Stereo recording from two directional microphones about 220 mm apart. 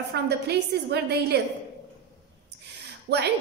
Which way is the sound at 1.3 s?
50° right (ahead or behind).